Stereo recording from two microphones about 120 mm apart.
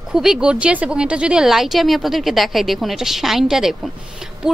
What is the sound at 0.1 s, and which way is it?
A woman's voice, 5° right (ahead or behind).